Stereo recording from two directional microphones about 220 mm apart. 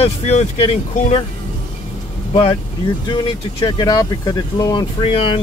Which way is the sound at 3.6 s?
20° left (ahead or behind).